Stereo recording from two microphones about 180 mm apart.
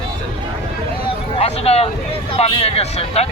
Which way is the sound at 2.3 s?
35° left (ahead or behind).